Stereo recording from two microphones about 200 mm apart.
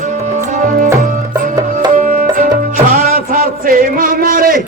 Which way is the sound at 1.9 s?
40° right (ahead or behind).